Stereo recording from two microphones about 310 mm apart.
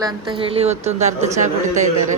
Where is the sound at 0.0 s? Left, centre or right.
Centre.